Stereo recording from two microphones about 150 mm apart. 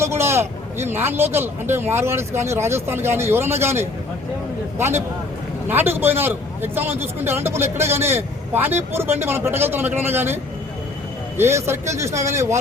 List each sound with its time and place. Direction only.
0.0 s a man's voice: 15° right (ahead or behind)
11.3 s speech: 15° right (ahead or behind)